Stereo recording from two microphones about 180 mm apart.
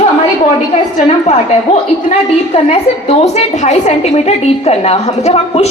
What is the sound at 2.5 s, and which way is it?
A woman's voice, 35° left (ahead or behind).